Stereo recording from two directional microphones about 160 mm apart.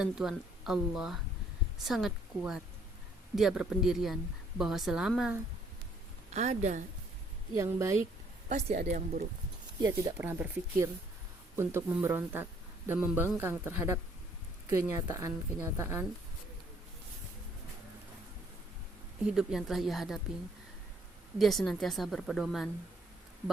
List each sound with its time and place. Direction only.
0.0 s speech: 5° right (ahead or behind)
6.3 s a woman's voice: 45° right (ahead or behind)
7.5 s a woman's voice: 20° right (ahead or behind)
8.4 s a woman's voice: 45° right (ahead or behind)
9.8 s a woman's voice: 25° right (ahead or behind)
10.2 s a man's voice: 15° right (ahead or behind)
19.4 s speech: 5° right (ahead or behind)
21.3 s speech: centre (ahead or behind)